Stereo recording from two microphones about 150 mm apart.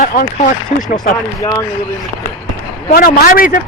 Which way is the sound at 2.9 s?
75° left (ahead or behind).